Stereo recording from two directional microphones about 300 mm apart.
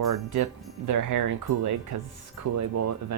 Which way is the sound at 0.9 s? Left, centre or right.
Right.